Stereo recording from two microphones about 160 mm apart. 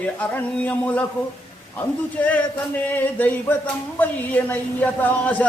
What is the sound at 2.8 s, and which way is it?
Speech, 10° left (ahead or behind).